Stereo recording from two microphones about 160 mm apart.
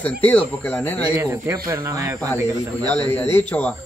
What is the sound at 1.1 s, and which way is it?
Speech, 15° right (ahead or behind).